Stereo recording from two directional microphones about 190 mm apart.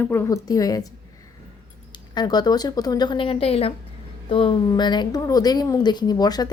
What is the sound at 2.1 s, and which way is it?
Speech, 20° left (ahead or behind).